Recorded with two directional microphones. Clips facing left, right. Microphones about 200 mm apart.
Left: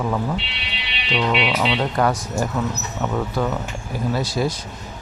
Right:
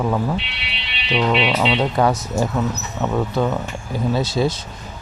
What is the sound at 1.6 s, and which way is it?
Speech, 20° right (ahead or behind).